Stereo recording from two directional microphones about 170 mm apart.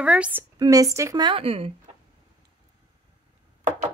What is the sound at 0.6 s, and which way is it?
Speech, 20° right (ahead or behind).